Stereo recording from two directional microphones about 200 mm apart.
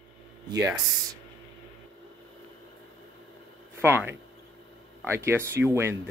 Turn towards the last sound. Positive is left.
turn(degrees=-10)  # may be behind; listen again after turning